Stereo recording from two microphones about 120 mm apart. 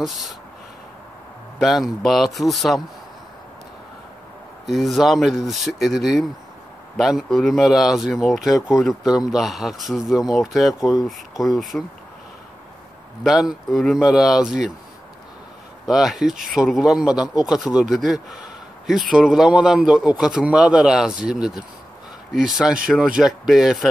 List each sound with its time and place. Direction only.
1.6 s a man's voice: centre (ahead or behind)
4.6 s a man's voice: centre (ahead or behind)
13.2 s a man's voice: 5° right (ahead or behind)
15.8 s a man's voice: 5° right (ahead or behind)